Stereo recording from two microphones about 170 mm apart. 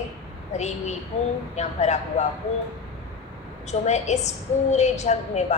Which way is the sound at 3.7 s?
40° left (ahead or behind).